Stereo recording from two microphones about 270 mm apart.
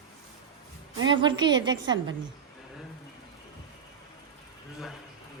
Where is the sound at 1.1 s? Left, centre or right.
Centre.